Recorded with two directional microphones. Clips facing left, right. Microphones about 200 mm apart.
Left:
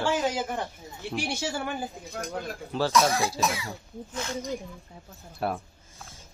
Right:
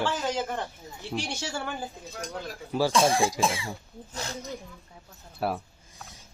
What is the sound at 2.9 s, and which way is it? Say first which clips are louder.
Speech: even; 30° right (ahead or behind).